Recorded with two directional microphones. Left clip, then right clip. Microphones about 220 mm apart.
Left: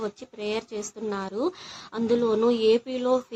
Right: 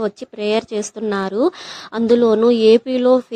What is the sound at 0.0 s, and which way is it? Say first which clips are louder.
Speech: right 10 dB; 30° right (ahead or behind).